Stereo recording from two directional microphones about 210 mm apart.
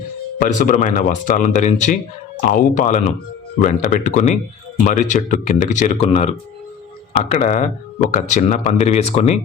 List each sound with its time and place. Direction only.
0.3 s speech: 40° left (ahead or behind)